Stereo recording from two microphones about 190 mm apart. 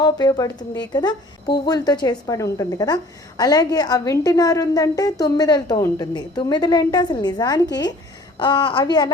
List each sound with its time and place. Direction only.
0.0 s a woman's voice: 20° left (ahead or behind)